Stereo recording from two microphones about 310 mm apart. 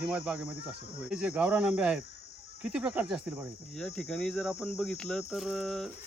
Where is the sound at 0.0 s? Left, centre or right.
Centre.